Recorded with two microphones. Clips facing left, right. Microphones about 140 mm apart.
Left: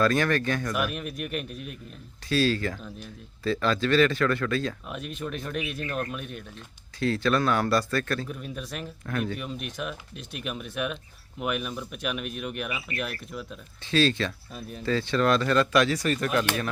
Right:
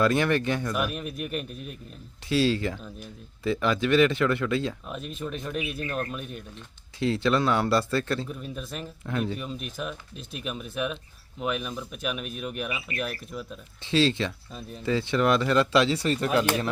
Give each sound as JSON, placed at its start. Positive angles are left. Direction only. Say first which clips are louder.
{"t": 0.0, "sound": "speech", "louder": "right 1 dB", "side_deg": -20}
{"t": 0.7, "sound": "speech", "louder": "even", "side_deg": 0}
{"t": 2.3, "sound": "speech", "louder": "right 1 dB", "side_deg": -20}
{"t": 5.1, "sound": "speech", "louder": "even", "side_deg": 0}
{"t": 7.0, "sound": "speech", "louder": "right 1 dB", "side_deg": -20}
{"t": 8.3, "sound": "speech", "louder": "even", "side_deg": 0}
{"t": 9.0, "sound": "speech", "louder": "right 1 dB", "side_deg": -20}
{"t": 9.3, "sound": "speech", "louder": "even", "side_deg": 0}
{"t": 13.8, "sound": "speech", "louder": "even", "side_deg": -25}